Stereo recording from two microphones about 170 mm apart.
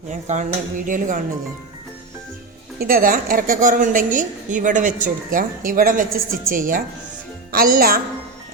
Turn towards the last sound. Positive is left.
turn(degrees=-55)  # may be behind; listen again after turning